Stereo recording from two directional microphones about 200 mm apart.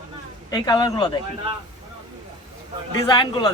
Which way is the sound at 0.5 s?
20° left (ahead or behind).